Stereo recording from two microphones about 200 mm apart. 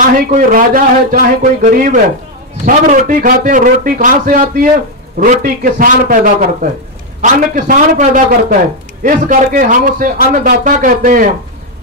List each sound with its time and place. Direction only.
0.3 s a man's voice: 40° right (ahead or behind)